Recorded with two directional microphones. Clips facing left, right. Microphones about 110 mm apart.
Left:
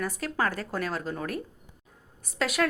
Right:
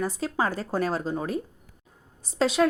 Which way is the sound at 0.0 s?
25° right (ahead or behind).